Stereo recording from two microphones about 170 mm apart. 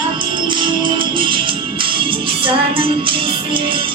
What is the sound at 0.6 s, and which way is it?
Music, 30° right (ahead or behind).